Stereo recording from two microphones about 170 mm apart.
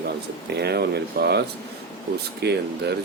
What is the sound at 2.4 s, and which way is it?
Speech, 75° right (ahead or behind).